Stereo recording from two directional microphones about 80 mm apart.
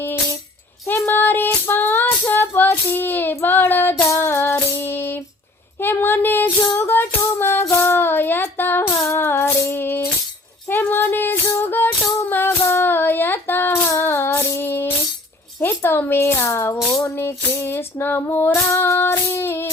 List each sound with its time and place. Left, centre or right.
0.9 s child singing: left
5.8 s a sound: left
6.7 s music: left
7.6 s female singing: left
10.7 s music: left
12.6 s child singing: left
13.9 s music: left
17.0 s female singing: left